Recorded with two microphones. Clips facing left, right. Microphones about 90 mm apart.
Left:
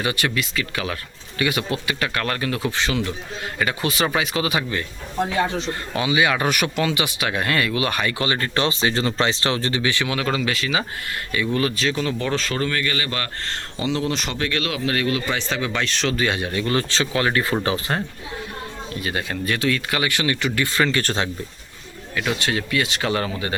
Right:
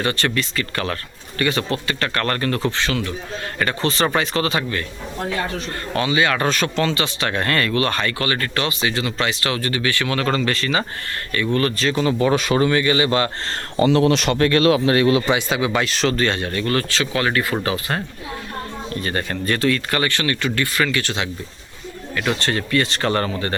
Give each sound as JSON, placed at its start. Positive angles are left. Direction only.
{"t": 0.0, "sound": "speech", "side_deg": 10}
{"t": 2.7, "sound": "speech", "side_deg": 15}
{"t": 13.5, "sound": "speech", "side_deg": -50}
{"t": 14.0, "sound": "speech", "side_deg": -70}
{"t": 14.3, "sound": "speech", "side_deg": -45}
{"t": 15.4, "sound": "speech", "side_deg": -10}
{"t": 18.9, "sound": "speech", "side_deg": 5}
{"t": 20.7, "sound": "speech", "side_deg": 30}
{"t": 21.0, "sound": "speech", "side_deg": 40}
{"t": 22.1, "sound": "speech", "side_deg": 5}